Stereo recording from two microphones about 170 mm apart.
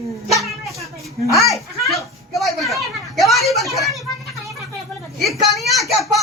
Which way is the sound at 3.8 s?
Centre (ahead or behind).